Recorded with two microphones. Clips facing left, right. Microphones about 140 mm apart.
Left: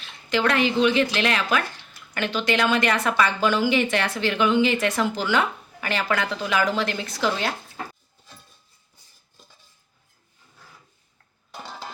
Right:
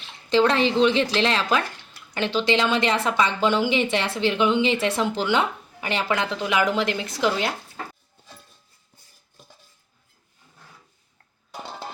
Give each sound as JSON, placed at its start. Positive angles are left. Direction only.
{"t": 0.3, "sound": "speech", "side_deg": -30}